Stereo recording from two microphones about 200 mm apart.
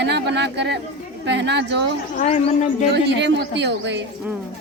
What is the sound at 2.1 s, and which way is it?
Speech, 35° left (ahead or behind).